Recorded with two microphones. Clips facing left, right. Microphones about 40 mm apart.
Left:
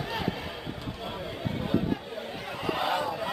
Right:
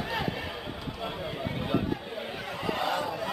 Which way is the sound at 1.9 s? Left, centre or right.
Centre.